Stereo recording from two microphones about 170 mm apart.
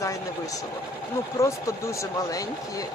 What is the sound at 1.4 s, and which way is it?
Speech, 20° left (ahead or behind).